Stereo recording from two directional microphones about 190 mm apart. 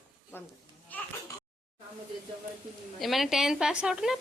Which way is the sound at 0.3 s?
10° left (ahead or behind).